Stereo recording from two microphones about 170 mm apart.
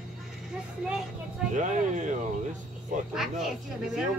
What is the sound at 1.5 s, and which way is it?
Speech, 45° right (ahead or behind).